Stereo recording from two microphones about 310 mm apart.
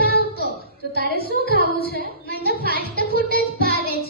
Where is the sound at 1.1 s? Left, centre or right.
Left.